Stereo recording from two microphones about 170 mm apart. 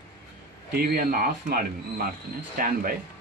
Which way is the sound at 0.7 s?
65° right (ahead or behind).